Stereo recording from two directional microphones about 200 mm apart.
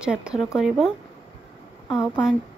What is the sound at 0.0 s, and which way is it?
A woman's voice, 5° right (ahead or behind).